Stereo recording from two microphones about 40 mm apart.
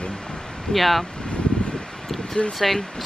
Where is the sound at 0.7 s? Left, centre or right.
Centre.